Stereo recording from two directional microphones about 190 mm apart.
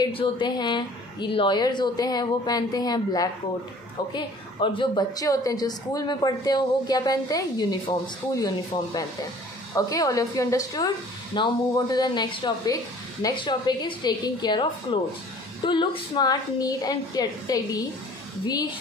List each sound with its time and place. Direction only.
0.0 s a woman's voice: 25° left (ahead or behind)